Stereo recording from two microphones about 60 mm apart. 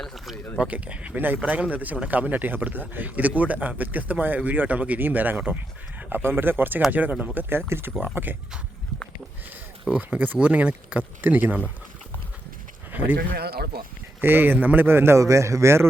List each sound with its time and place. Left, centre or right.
0.0 s speech: centre
0.6 s a man's voice: right
6.0 s a sound: right
6.2 s a man's voice: right
7.7 s a man's voice: right
9.9 s a man's voice: right
12.9 s a sound: right
14.2 s a man's voice: right
15.2 s a man's voice: right